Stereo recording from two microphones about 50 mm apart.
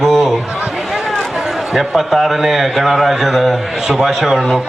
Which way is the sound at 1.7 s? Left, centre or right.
Centre.